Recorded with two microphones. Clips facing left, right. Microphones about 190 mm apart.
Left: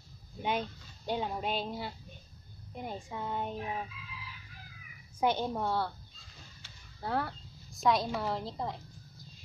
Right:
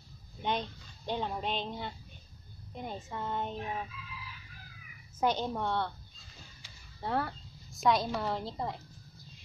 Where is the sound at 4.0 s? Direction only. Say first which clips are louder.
Right 2 dB; 45° right (ahead or behind).